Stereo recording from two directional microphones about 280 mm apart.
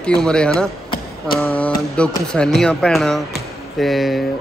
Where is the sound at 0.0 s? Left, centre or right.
Centre.